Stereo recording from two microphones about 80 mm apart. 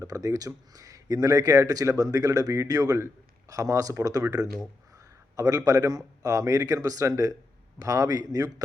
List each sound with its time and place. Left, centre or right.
0.0 s speech: right
4.9 s a sound: right
6.2 s speech: right